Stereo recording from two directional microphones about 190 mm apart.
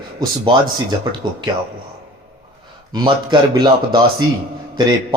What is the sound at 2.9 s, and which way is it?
Speech, 20° right (ahead or behind).